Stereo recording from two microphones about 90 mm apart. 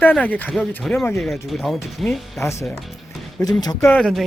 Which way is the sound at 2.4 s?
35° left (ahead or behind).